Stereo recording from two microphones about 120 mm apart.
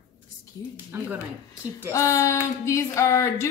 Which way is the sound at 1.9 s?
25° left (ahead or behind).